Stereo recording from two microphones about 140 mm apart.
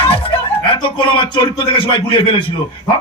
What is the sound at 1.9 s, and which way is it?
Speech, 35° left (ahead or behind).